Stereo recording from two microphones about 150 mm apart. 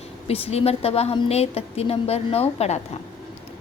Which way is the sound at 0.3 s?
40° left (ahead or behind).